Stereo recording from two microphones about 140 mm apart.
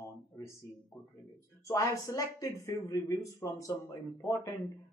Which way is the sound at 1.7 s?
25° left (ahead or behind).